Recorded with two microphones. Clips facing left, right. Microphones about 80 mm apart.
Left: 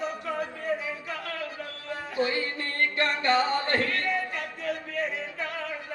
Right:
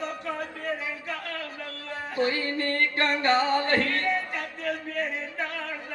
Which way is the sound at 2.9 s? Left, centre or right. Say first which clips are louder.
Even; right.